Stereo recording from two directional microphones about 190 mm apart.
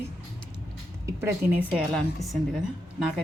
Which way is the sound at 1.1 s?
15° right (ahead or behind).